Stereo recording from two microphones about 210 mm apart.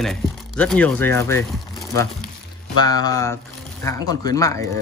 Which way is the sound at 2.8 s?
20° left (ahead or behind).